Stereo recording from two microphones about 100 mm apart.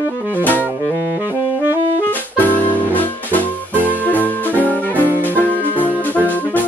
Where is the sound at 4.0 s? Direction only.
15° left (ahead or behind).